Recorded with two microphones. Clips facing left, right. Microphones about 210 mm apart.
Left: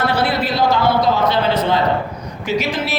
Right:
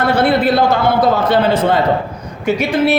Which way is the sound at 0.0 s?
55° right (ahead or behind).